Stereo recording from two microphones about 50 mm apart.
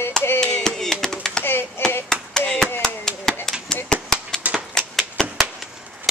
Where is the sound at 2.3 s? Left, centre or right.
Centre.